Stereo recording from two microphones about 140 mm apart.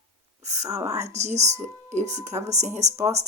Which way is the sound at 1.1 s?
55° right (ahead or behind).